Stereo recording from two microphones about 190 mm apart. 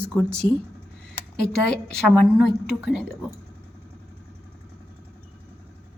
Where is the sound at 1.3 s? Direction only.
60° left (ahead or behind).